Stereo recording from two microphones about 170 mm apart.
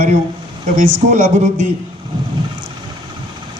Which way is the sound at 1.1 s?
45° right (ahead or behind).